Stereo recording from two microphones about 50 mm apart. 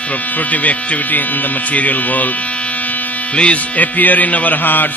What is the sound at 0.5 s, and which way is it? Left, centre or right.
Music, left.